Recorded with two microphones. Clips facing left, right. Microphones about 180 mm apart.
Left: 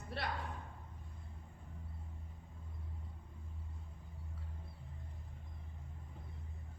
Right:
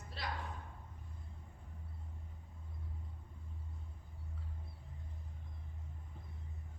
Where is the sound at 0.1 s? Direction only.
60° left (ahead or behind).